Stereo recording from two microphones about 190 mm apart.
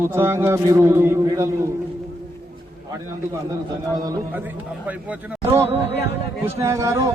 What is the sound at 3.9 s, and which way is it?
A man's voice, 20° right (ahead or behind).